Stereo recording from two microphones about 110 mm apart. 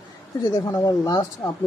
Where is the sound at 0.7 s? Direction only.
30° left (ahead or behind).